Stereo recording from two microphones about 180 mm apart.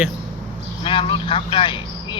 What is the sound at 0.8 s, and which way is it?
Vehicle, 30° left (ahead or behind).